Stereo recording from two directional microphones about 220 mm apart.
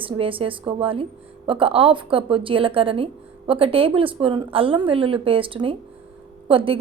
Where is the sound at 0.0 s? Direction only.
25° right (ahead or behind).